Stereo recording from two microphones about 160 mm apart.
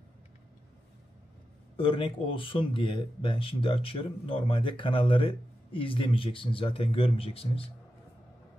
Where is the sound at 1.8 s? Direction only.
35° left (ahead or behind).